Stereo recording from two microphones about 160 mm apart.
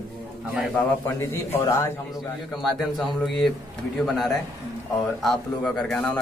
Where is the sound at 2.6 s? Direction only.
Centre (ahead or behind).